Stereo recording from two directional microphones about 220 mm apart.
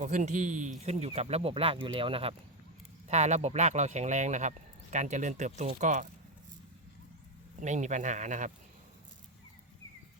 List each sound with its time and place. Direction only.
0.0 s speech: 35° right (ahead or behind)
7.6 s speech: 30° right (ahead or behind)